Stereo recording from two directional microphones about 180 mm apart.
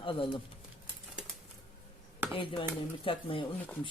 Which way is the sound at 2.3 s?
30° left (ahead or behind).